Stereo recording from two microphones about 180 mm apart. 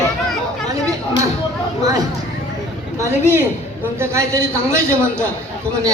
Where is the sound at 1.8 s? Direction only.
20° right (ahead or behind).